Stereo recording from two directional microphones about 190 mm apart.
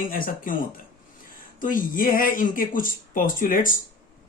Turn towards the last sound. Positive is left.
turn(degrees=45)  # may be behind; listen again after turning